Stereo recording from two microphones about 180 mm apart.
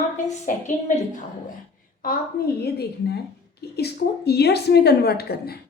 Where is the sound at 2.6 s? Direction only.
60° left (ahead or behind).